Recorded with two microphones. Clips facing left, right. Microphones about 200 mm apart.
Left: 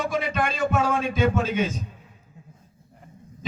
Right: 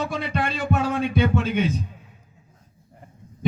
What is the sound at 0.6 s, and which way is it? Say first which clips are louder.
Music: even; 60° right (ahead or behind).